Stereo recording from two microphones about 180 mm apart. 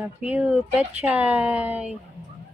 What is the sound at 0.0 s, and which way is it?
Speech, 10° right (ahead or behind).